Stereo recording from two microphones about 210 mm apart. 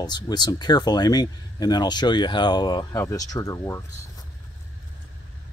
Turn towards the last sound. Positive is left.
turn(degrees=15)  # may be behind; listen again after turning